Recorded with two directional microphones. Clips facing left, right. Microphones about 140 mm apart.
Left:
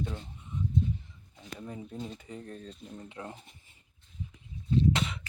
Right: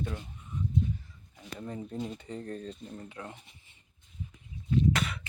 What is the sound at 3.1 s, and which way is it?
Speech, 25° left (ahead or behind).